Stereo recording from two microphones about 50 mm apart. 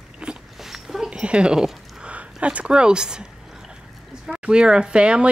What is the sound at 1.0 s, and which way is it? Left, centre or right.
Speech, centre.